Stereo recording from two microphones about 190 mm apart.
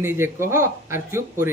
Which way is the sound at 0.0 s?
15° right (ahead or behind).